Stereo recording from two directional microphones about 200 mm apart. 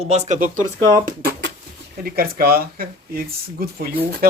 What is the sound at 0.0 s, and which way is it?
Speech, 35° right (ahead or behind).